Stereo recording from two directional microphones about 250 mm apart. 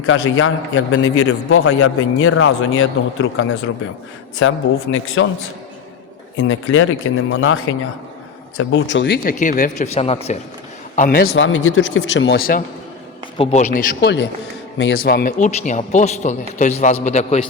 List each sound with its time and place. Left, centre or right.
0.0 s a man's voice: left
6.3 s a man's voice: left
11.3 s a man's voice: left
14.0 s a man's voice: left